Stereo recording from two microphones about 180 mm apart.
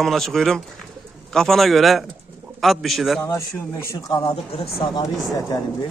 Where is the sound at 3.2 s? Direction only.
15° left (ahead or behind).